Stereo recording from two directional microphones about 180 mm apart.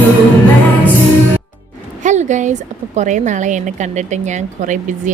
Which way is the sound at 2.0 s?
40° right (ahead or behind).